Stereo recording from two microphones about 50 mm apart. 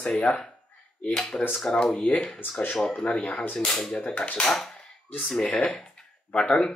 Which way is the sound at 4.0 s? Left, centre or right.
Left.